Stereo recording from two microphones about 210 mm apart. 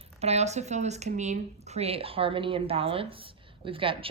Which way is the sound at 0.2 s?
30° right (ahead or behind).